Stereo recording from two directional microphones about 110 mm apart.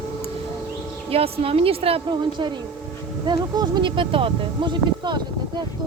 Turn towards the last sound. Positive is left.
turn(degrees=-45)  # may be behind; listen again after turning